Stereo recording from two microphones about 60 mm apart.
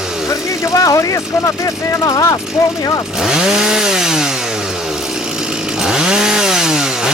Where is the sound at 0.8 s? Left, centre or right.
Left.